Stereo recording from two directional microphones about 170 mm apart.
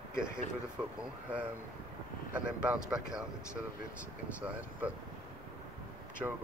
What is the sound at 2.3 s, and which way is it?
Speech, 10° right (ahead or behind).